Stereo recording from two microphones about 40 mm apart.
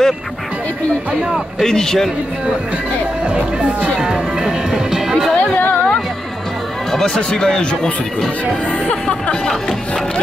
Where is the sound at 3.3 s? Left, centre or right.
Right; by 5.3 s centre.